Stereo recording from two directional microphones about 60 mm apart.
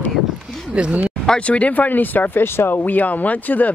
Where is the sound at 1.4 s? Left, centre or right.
Left.